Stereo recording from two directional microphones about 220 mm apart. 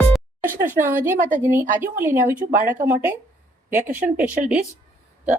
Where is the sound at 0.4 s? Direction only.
10° right (ahead or behind).